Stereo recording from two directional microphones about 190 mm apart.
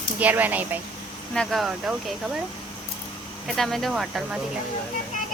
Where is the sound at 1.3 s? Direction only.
Centre (ahead or behind).